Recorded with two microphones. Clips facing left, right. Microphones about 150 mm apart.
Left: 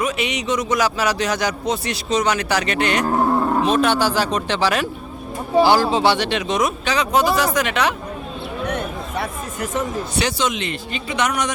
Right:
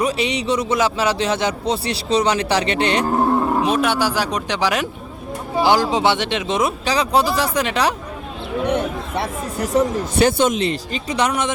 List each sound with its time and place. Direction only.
0.0 s speech: 35° right (ahead or behind)
3.3 s speech: 5° right (ahead or behind); by 7.9 s 35° right (ahead or behind)
9.1 s speech: 30° right (ahead or behind)
10.2 s speech: 50° right (ahead or behind)
10.6 s speech: 35° right (ahead or behind)